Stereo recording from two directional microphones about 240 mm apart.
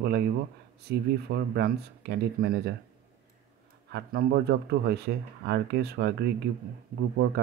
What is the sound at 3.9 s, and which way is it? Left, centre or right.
Speech, right.